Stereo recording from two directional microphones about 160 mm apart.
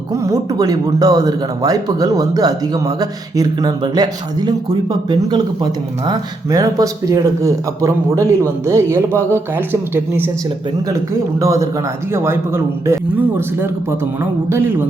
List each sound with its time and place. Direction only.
0.1 s speech: 20° right (ahead or behind)
11.3 s speech: 20° right (ahead or behind)